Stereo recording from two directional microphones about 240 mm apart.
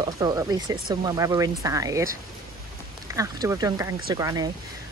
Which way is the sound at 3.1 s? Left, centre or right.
Centre.